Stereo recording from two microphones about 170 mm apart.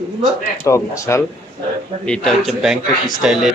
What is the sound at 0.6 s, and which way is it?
Speech, 15° left (ahead or behind).